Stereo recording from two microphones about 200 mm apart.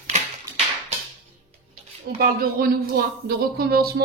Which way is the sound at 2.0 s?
50° right (ahead or behind).